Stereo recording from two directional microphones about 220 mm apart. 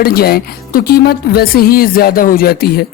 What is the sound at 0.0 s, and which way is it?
Speech, 45° left (ahead or behind).